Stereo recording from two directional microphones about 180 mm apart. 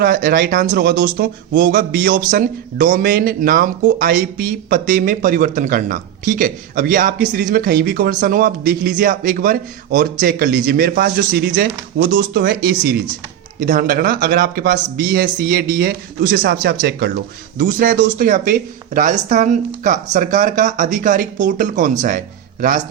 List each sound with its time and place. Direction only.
0.0 s speech: 55° right (ahead or behind)
1.1 s speech: 55° right (ahead or behind)
17.6 s speech: 50° right (ahead or behind)